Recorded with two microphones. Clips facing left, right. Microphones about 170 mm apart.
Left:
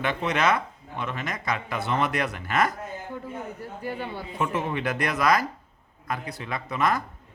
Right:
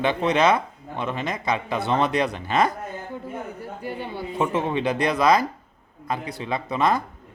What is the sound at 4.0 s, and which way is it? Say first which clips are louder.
Speech: right 6 dB; 25° right (ahead or behind).